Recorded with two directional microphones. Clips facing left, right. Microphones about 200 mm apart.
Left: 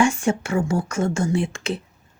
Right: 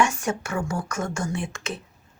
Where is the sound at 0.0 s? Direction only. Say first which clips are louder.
Left 5 dB; 30° left (ahead or behind).